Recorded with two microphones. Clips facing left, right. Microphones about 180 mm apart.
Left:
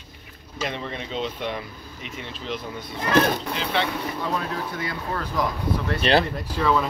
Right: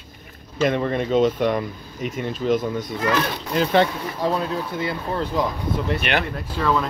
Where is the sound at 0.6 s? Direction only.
50° right (ahead or behind).